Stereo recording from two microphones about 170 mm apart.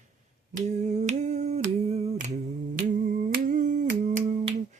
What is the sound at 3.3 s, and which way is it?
Humming, 45° right (ahead or behind).